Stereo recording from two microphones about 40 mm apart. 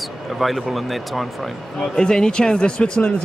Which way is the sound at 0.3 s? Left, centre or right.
Centre.